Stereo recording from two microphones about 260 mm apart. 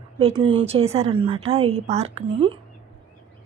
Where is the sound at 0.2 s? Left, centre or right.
Right.